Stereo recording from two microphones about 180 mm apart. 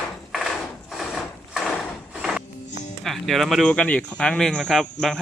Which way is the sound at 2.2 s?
Centre (ahead or behind).